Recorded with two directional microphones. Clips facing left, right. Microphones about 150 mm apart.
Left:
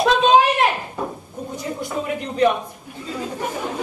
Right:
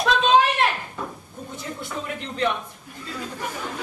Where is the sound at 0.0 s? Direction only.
40° left (ahead or behind).